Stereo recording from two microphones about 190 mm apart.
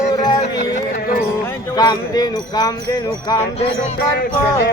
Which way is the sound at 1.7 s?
20° left (ahead or behind).